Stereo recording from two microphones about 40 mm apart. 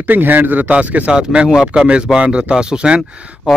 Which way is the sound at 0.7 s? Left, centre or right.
Right.